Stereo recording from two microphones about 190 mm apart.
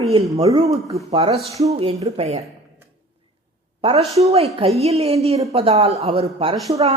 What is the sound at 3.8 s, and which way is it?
A woman's voice, 30° right (ahead or behind).